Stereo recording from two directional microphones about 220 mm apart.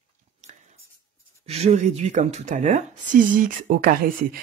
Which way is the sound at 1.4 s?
30° right (ahead or behind).